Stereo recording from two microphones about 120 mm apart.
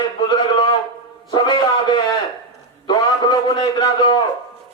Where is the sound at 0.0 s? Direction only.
35° left (ahead or behind).